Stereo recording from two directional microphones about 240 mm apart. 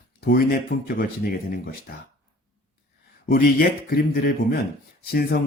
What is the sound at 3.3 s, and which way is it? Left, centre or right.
A man's voice, left.